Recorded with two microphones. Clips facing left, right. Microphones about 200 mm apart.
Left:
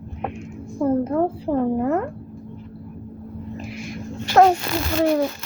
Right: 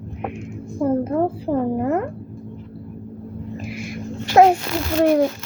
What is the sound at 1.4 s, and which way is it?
Speech, 5° right (ahead or behind).